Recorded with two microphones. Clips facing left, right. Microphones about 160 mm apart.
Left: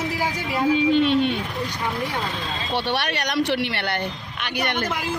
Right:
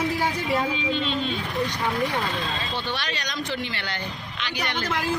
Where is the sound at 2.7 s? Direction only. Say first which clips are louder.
Left 6 dB; 70° left (ahead or behind).